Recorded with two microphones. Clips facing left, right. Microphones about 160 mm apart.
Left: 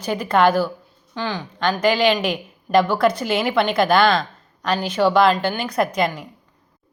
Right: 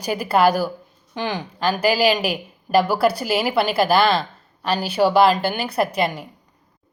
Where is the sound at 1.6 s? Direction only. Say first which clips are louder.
Left 1 dB; 5° right (ahead or behind).